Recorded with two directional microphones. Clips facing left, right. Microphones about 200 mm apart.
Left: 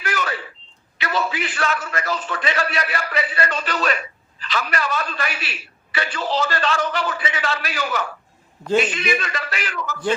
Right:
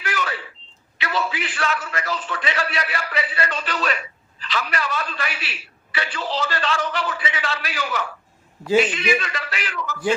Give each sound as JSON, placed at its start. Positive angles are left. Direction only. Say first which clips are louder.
{"t": 0.0, "sound": "a sound", "louder": "left 2 dB", "side_deg": 45}
{"t": 0.9, "sound": "a man's voice", "louder": "left 2 dB", "side_deg": 45}
{"t": 8.6, "sound": "a man's voice", "louder": "right 1 dB", "side_deg": -5}
{"t": 8.9, "sound": "a man's voice", "louder": "right 1 dB", "side_deg": 45}